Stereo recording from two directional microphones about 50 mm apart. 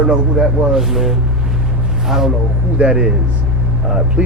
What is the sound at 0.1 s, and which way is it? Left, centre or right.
Speech, centre.